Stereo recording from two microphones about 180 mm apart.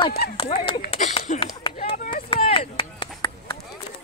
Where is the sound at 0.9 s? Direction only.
35° left (ahead or behind).